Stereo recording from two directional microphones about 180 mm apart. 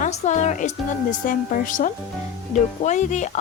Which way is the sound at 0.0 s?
40° left (ahead or behind).